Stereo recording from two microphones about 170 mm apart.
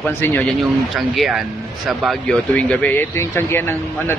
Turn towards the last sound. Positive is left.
turn(degrees=15)  # may be behind; listen again after turning